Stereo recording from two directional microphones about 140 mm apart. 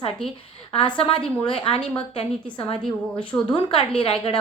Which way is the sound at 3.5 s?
35° left (ahead or behind).